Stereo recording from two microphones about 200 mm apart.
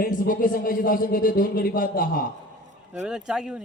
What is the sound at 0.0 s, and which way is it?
A man's voice, 40° left (ahead or behind).